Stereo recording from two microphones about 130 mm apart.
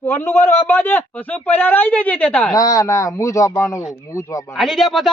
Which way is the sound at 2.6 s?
25° left (ahead or behind).